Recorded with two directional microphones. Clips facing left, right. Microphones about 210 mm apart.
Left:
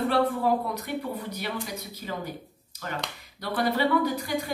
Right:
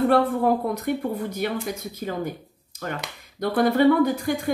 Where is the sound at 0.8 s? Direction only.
50° right (ahead or behind).